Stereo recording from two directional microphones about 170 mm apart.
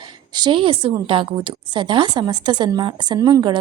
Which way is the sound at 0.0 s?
25° right (ahead or behind).